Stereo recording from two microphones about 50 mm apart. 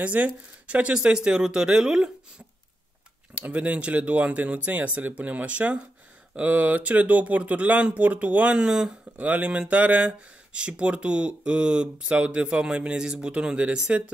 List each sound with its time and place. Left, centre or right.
0.0 s speech: right
3.3 s speech: right
9.1 s speech: right